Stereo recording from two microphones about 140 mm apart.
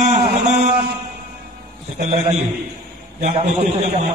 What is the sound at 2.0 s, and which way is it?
Speech, 55° right (ahead or behind).